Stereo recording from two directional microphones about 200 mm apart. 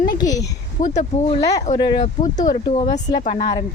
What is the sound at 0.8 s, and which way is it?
Speech, 35° left (ahead or behind).